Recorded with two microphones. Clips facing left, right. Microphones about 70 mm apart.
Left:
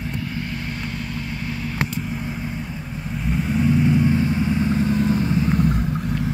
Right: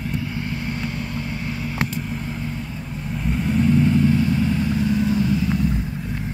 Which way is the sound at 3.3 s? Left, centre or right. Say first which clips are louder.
Right 1 dB; centre.